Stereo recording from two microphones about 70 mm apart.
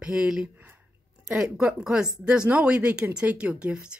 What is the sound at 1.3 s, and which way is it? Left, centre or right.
Speech, centre.